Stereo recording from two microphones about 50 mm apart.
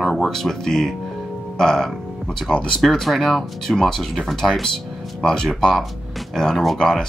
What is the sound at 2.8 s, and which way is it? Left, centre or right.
Speech, centre.